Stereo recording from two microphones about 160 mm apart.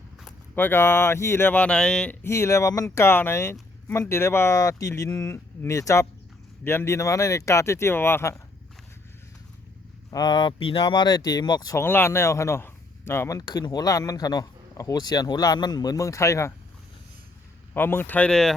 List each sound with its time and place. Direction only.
0.5 s speech: 15° left (ahead or behind)
2.2 s speech: 15° left (ahead or behind)
10.1 s speech: 25° left (ahead or behind)
17.7 s speech: 15° left (ahead or behind)